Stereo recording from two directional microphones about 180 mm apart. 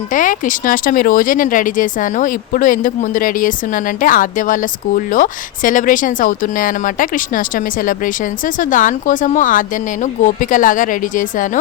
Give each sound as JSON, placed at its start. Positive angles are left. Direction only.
{"t": 0.1, "sound": "speech", "side_deg": 45}